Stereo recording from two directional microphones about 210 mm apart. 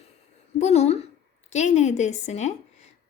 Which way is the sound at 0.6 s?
30° left (ahead or behind).